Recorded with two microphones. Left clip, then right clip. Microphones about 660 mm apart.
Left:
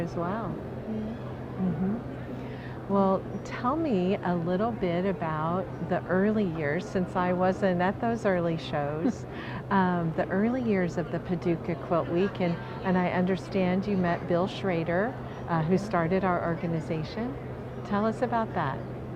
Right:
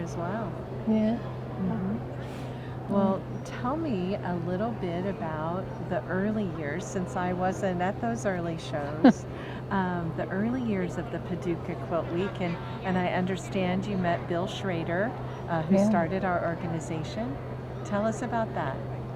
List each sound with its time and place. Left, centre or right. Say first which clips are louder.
2.9 s speech: left 2 dB; left